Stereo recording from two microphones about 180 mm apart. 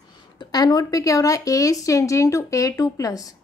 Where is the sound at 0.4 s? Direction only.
20° left (ahead or behind).